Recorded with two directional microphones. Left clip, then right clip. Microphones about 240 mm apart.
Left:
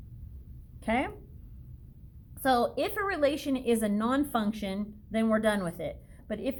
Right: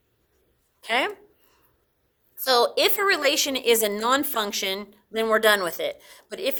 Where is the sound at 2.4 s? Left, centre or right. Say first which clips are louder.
Right 7 dB; right.